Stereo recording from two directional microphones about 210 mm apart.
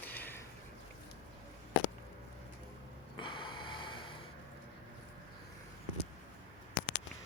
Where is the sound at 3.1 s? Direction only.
25° left (ahead or behind).